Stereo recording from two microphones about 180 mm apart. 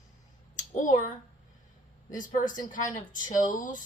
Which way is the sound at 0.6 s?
45° left (ahead or behind).